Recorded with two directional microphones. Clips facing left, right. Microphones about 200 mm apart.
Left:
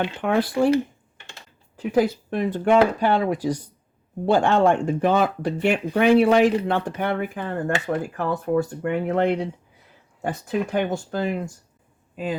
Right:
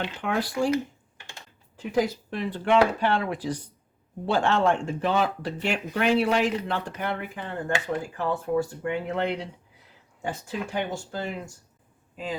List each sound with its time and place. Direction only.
0.0 s speech: 55° left (ahead or behind)
1.8 s speech: 60° left (ahead or behind)
10.7 s a man's voice: 60° left (ahead or behind)